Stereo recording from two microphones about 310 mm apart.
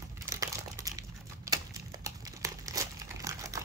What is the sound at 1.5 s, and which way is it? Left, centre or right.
Crumpling, centre.